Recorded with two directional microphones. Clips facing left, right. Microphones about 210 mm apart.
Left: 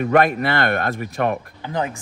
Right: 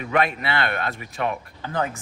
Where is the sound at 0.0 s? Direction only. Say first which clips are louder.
Left 6 dB; 50° left (ahead or behind).